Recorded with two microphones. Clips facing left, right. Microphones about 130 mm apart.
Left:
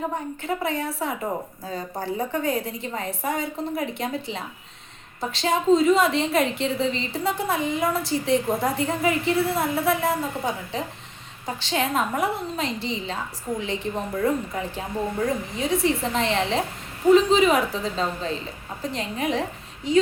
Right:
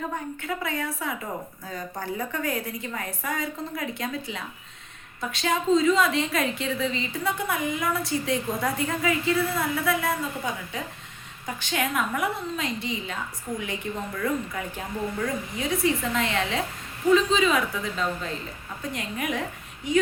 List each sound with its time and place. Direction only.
0.4 s a woman's voice: 30° left (ahead or behind)